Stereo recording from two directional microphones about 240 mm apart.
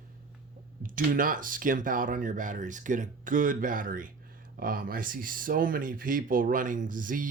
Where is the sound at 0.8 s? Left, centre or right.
Right.